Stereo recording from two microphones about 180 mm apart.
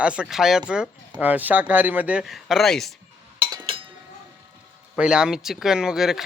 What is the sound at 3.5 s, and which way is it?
Chink, 25° right (ahead or behind).